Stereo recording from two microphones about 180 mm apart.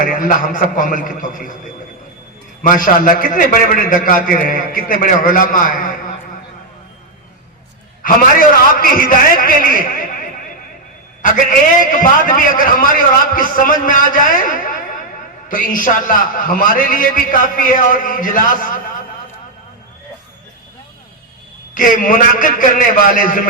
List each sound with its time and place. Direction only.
0.0 s a man's voice: 50° left (ahead or behind)
8.0 s a man's voice: 50° left (ahead or behind)
11.2 s a man's voice: 45° left (ahead or behind)
21.8 s a man's voice: 50° left (ahead or behind)